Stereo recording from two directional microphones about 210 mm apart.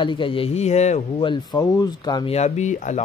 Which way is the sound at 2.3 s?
35° left (ahead or behind).